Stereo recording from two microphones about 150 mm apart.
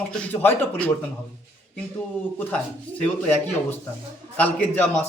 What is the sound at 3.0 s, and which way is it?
A man's voice, 15° left (ahead or behind).